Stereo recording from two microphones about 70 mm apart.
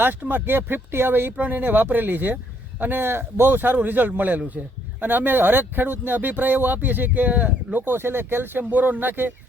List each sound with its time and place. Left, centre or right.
0.0 s speech: right